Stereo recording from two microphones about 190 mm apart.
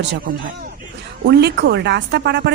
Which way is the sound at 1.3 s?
60° right (ahead or behind).